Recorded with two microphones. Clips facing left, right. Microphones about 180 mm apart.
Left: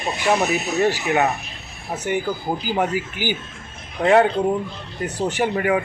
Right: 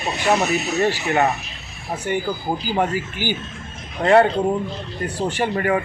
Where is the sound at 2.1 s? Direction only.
15° left (ahead or behind).